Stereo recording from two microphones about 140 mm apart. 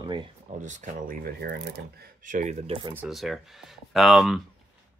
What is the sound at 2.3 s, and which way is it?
Speech, 65° right (ahead or behind).